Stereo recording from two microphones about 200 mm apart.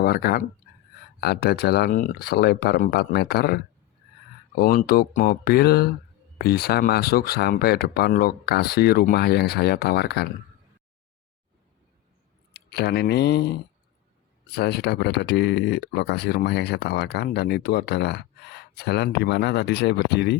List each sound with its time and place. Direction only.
0.0 s speech: 50° left (ahead or behind)
4.6 s speech: 45° left (ahead or behind)
12.5 s speech: 55° left (ahead or behind)
14.5 s speech: 55° left (ahead or behind)